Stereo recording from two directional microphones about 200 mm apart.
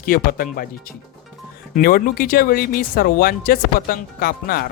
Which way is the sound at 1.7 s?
45° left (ahead or behind).